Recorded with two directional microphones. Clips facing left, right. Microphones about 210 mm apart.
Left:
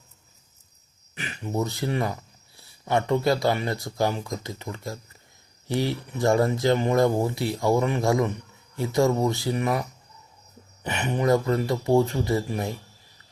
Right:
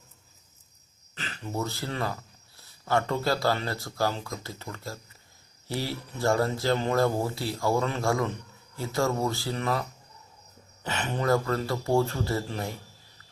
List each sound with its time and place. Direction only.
1.1 s speech: 15° left (ahead or behind)
10.8 s speech: 15° left (ahead or behind)